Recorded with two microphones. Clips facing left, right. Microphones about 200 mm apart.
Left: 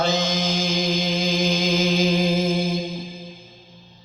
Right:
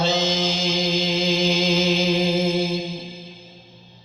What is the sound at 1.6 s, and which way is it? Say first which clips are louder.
Music: even; 55° left (ahead or behind).